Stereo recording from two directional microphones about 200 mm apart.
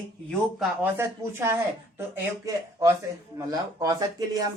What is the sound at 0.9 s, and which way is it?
Speech, 10° right (ahead or behind).